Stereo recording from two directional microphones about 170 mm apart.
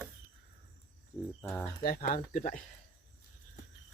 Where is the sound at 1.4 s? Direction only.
15° left (ahead or behind).